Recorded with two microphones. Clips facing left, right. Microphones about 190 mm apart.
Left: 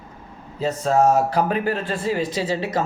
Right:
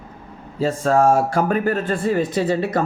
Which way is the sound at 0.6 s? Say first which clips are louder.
Right 2 dB; 45° right (ahead or behind).